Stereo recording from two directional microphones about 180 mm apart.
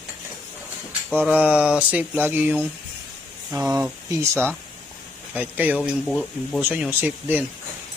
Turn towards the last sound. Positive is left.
turn(degrees=-10)  # may be behind; listen again after turning